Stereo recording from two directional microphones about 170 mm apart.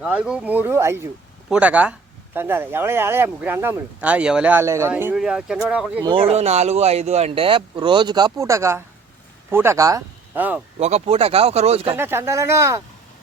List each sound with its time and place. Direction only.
0.0 s speech: 5° right (ahead or behind)
6.1 s speech: 35° right (ahead or behind); by 10.6 s 10° right (ahead or behind)
10.8 s speech: 40° right (ahead or behind)
11.9 s speech: 15° right (ahead or behind)